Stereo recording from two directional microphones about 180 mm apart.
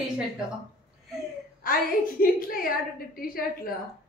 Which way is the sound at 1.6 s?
50° left (ahead or behind).